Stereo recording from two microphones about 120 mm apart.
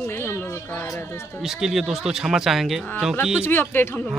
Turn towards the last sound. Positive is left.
turn(degrees=15)  # may be behind; listen again after turning